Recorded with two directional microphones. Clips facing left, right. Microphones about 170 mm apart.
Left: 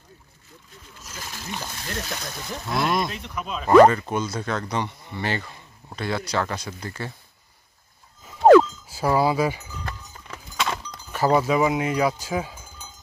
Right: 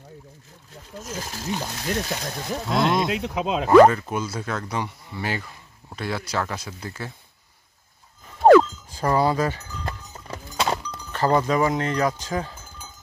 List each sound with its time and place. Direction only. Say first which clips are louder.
1.0 s speech: right 5 dB; 45° right (ahead or behind)
1.5 s speech: right 6 dB; 25° right (ahead or behind)
3.1 s speech: right 8 dB; 90° right
3.7 s speech: even; centre (ahead or behind)
8.4 s a sound: even; centre (ahead or behind)
9.8 s livestock: right 6 dB; 35° right (ahead or behind)
11.1 s cowbell: left 1 dB; 10° left (ahead or behind)